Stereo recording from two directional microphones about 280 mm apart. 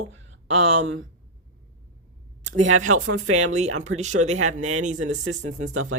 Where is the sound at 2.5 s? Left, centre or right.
Right.